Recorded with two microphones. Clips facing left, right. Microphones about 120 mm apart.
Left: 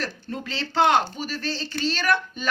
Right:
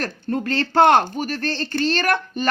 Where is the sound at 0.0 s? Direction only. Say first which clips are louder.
Right 7 dB; 50° right (ahead or behind).